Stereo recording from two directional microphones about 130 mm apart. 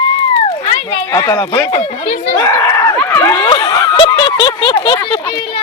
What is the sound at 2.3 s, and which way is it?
Speech, 20° left (ahead or behind).